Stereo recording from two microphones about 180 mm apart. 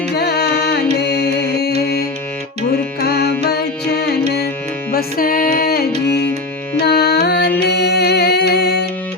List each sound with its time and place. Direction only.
0.1 s carnatic music: 65° left (ahead or behind)
3.0 s music: 65° left (ahead or behind)
4.9 s music: 55° left (ahead or behind)
6.8 s music: 65° left (ahead or behind)